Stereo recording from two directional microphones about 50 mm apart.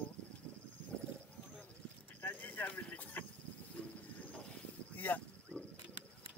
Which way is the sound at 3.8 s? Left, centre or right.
Centre.